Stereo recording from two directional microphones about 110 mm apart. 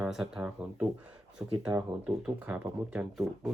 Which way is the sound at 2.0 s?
15° right (ahead or behind).